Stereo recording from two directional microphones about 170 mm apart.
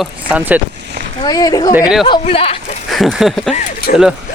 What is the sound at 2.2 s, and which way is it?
Speech, 35° left (ahead or behind).